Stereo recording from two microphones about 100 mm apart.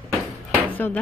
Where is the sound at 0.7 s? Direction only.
20° left (ahead or behind).